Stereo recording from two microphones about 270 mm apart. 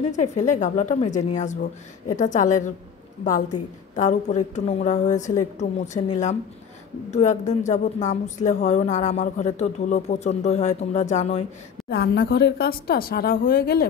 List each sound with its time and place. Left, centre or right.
0.1 s a woman's voice: left
7.1 s a woman's voice: left
11.9 s speech: left